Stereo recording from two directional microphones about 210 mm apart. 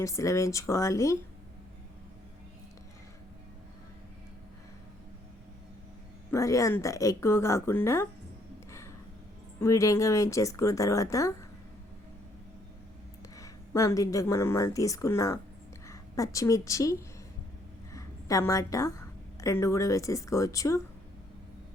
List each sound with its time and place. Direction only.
0.0 s speech: 15° left (ahead or behind)
6.3 s speech: 15° left (ahead or behind)
9.6 s speech: 15° left (ahead or behind)
13.3 s a woman's voice: 15° left (ahead or behind)